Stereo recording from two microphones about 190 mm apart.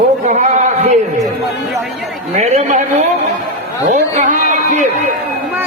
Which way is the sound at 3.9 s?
40° right (ahead or behind).